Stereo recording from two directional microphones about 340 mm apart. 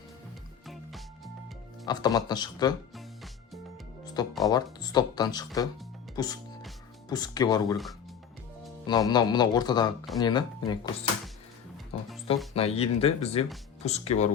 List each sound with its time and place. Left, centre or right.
0.7 s music: centre
1.9 s speech: centre
4.0 s music: centre
4.4 s speech: centre
8.9 s speech: centre
11.9 s speech: centre